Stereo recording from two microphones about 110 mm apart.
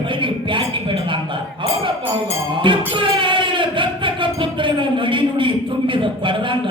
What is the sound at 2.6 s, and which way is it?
Music, 50° right (ahead or behind).